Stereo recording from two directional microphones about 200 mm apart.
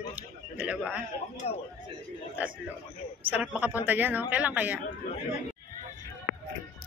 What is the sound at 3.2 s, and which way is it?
A woman's voice, 10° right (ahead or behind).